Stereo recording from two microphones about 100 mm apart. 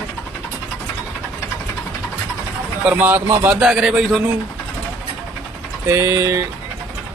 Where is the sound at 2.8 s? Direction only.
15° right (ahead or behind).